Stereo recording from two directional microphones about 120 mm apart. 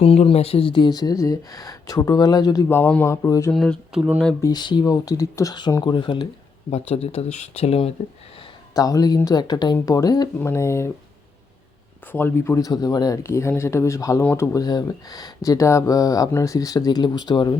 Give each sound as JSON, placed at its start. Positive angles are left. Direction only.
{"t": 0.0, "sound": "speech", "side_deg": 55}
{"t": 2.6, "sound": "speech", "side_deg": 20}
{"t": 3.2, "sound": "speech", "side_deg": 30}
{"t": 3.5, "sound": "speech", "side_deg": 0}
{"t": 4.4, "sound": "speech", "side_deg": 35}
{"t": 6.7, "sound": "speech", "side_deg": 60}
{"t": 8.7, "sound": "speech", "side_deg": 30}
{"t": 10.3, "sound": "speech", "side_deg": 20}
{"t": 12.1, "sound": "speech", "side_deg": 20}
{"t": 13.2, "sound": "speech", "side_deg": 25}